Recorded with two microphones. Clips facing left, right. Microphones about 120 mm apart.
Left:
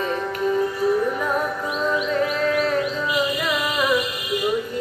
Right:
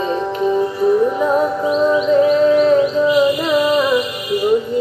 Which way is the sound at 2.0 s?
25° right (ahead or behind).